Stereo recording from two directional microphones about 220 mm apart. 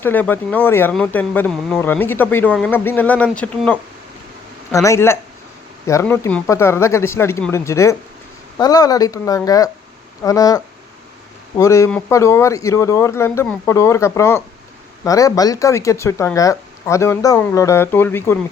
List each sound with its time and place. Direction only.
0.0 s speech: 10° left (ahead or behind)